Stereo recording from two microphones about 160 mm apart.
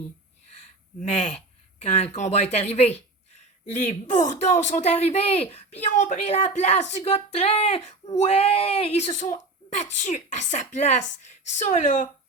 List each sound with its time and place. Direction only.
1.0 s speech: 45° left (ahead or behind)